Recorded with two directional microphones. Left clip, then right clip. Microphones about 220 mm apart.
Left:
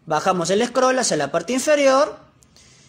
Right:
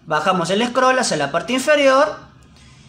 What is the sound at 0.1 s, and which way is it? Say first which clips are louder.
Speech: right 1 dB; 30° left (ahead or behind).